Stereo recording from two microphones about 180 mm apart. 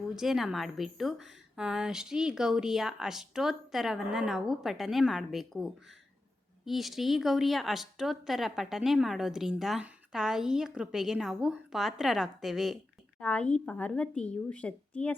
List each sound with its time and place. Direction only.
0.2 s a woman's voice: centre (ahead or behind)